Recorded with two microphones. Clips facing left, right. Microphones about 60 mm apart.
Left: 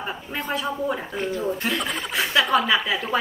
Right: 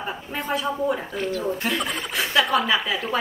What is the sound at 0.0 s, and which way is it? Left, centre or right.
A man's voice, centre.